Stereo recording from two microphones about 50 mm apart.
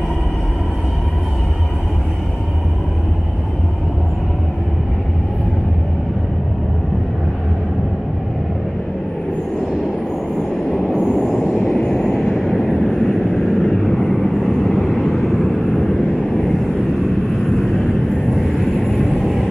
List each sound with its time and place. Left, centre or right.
11.1 s vehicle: centre